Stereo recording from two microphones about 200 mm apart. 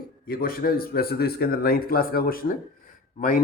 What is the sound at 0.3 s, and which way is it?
Speech, 45° left (ahead or behind).